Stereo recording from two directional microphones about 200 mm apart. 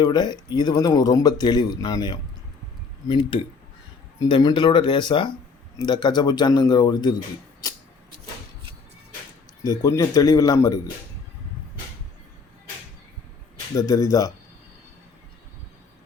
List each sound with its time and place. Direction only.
0.0 s speech: 20° left (ahead or behind)
7.6 s a sound: 20° left (ahead or behind)
9.6 s speech: 15° left (ahead or behind)
13.7 s speech: 15° left (ahead or behind)